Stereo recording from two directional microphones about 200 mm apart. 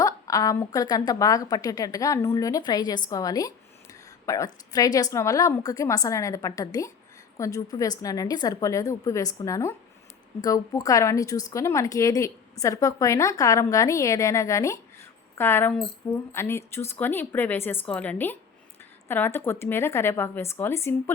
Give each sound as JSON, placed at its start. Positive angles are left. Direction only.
{"t": 0.0, "sound": "a woman's voice", "side_deg": 15}